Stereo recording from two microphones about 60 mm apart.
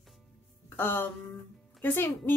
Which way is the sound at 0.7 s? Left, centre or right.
Left.